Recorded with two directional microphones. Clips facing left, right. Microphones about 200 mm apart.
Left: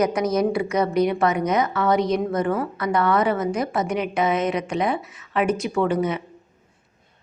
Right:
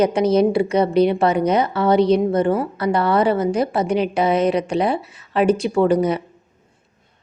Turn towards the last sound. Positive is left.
turn(degrees=-35)  # may be behind; listen again after turning